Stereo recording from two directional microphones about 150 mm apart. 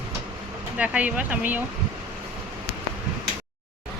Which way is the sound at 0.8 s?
10° right (ahead or behind).